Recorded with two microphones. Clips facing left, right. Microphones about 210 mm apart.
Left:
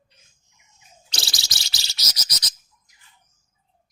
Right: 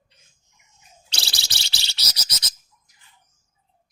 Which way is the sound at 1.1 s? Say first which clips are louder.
Left 1 dB; 30° right (ahead or behind).